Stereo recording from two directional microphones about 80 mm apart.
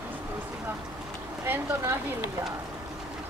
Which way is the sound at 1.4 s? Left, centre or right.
Right.